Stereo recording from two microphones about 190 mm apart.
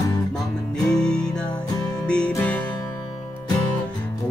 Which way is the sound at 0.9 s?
5° left (ahead or behind).